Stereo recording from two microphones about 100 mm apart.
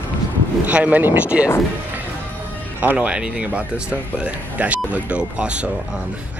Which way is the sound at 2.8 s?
15° right (ahead or behind).